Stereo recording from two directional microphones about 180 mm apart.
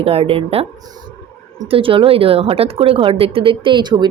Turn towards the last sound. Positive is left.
turn(degrees=-25)  # may be behind; listen again after turning